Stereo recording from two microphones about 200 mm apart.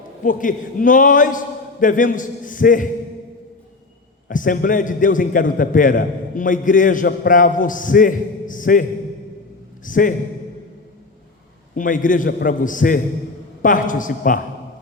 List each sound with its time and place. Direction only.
0.2 s a man's voice: 40° left (ahead or behind)
4.3 s a man's voice: 40° left (ahead or behind)
11.7 s a man's voice: 40° left (ahead or behind)